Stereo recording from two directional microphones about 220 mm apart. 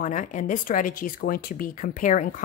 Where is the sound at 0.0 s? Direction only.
35° left (ahead or behind).